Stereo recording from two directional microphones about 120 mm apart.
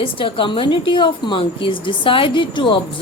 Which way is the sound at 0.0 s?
45° left (ahead or behind).